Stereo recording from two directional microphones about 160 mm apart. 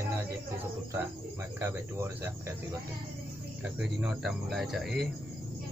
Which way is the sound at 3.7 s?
5° right (ahead or behind).